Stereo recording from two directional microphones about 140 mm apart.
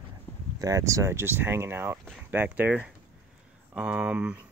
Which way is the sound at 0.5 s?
25° right (ahead or behind).